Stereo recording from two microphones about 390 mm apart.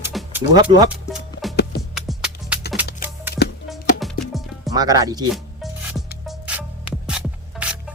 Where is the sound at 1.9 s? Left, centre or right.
Centre.